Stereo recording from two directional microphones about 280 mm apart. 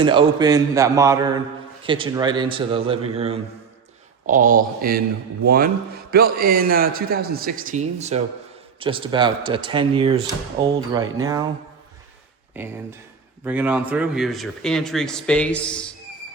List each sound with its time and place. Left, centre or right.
0.0 s a man's voice: centre
13.4 s speech: centre